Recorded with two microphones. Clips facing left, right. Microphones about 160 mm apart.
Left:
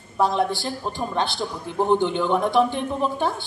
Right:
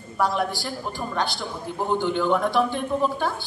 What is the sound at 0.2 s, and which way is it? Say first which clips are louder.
A woman's voice: left 3 dB; 25° left (ahead or behind).